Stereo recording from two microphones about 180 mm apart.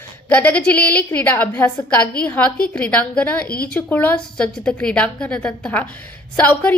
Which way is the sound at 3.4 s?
55° left (ahead or behind).